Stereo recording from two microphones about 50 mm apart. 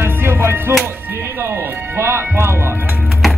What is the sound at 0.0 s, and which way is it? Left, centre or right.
Music, right.